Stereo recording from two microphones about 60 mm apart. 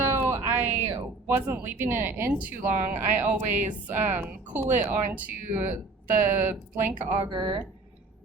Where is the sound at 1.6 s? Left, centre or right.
Right.